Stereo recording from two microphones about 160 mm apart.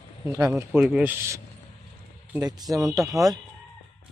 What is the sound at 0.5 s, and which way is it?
Speech, 5° right (ahead or behind).